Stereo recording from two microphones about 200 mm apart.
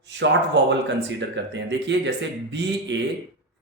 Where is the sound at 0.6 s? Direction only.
60° right (ahead or behind).